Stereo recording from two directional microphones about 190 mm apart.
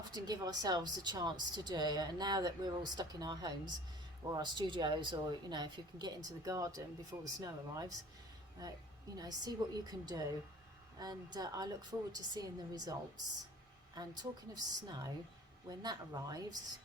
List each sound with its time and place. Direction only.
0.1 s speech: 20° right (ahead or behind)